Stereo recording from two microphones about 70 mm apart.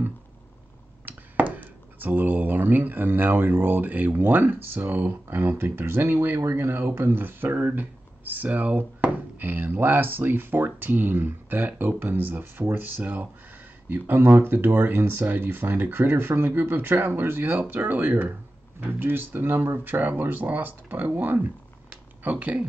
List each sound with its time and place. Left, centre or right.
1.0 s speech: right